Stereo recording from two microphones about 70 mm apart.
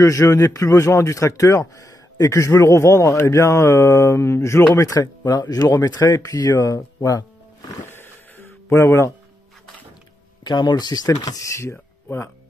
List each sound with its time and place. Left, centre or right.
0.0 s a man's voice: left
4.7 s speech: left
7.9 s a sound: left
10.4 s speech: left
11.4 s a man's voice: left